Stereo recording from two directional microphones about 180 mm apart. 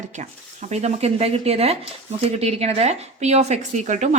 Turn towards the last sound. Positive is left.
turn(degrees=-40)  # may be behind; listen again after turning